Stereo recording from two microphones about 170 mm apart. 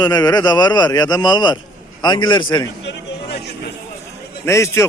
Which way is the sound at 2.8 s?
90° left.